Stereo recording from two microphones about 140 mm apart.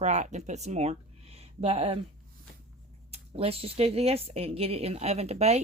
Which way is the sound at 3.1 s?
45° right (ahead or behind).